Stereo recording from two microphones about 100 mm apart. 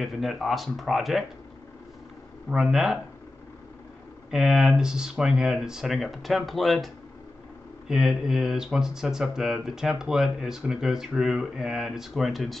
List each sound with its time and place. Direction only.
0.0 s speech: centre (ahead or behind)
2.5 s speech: 5° right (ahead or behind)
4.3 s speech: 5° right (ahead or behind)
7.9 s speech: 5° right (ahead or behind)